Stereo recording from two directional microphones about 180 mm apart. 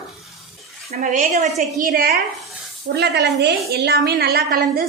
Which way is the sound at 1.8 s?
55° right (ahead or behind).